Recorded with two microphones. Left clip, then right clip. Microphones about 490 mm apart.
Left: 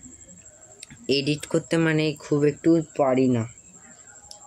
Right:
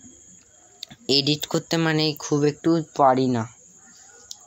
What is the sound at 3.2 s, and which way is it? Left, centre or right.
Speech, left.